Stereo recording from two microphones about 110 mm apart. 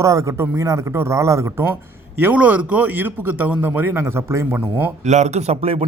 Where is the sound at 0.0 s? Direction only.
30° right (ahead or behind).